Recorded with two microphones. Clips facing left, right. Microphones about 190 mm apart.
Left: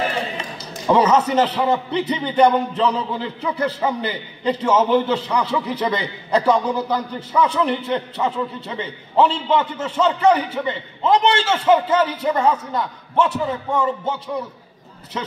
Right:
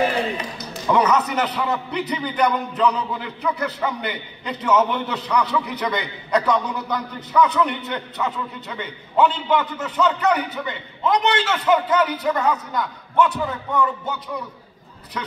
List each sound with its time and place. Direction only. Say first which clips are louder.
0.6 s a man's voice: left 3 dB; 25° left (ahead or behind)